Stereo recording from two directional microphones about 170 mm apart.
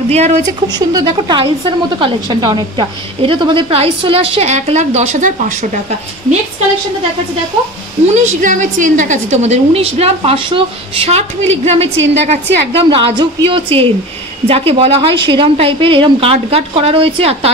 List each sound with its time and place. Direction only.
0.1 s a woman's voice: 40° right (ahead or behind)
0.7 s a woman's voice: 25° right (ahead or behind); by 5.7 s 40° right (ahead or behind)
8.1 s a woman's voice: 45° right (ahead or behind)